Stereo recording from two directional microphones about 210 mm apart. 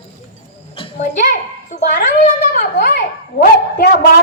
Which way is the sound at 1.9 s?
40° left (ahead or behind).